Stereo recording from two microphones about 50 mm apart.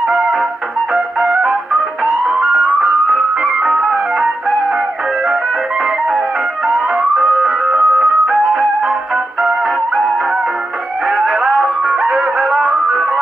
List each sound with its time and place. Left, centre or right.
0.0 s music: centre